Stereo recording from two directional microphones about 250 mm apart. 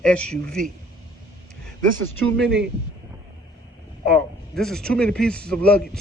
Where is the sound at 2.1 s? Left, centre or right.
Right.